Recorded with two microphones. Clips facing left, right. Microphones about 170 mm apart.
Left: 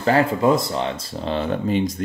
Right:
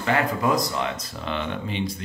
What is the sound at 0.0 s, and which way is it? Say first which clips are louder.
Speech: left 6 dB; 30° left (ahead or behind).